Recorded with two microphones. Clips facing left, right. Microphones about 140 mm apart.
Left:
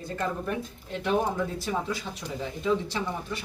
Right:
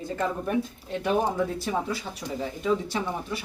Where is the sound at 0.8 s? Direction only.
Centre (ahead or behind).